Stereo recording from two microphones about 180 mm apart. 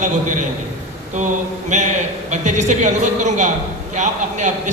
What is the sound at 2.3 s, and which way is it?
A man's voice, 40° right (ahead or behind).